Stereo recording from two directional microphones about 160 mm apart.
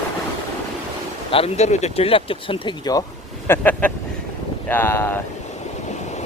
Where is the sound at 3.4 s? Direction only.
15° left (ahead or behind).